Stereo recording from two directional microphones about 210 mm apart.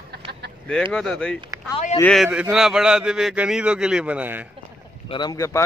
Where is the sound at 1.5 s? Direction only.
15° right (ahead or behind).